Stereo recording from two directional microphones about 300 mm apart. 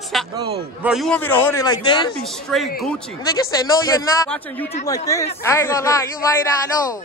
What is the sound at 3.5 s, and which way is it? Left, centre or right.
Speech, centre.